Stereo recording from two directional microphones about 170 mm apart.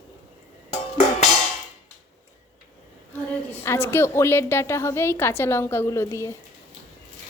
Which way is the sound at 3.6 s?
15° left (ahead or behind).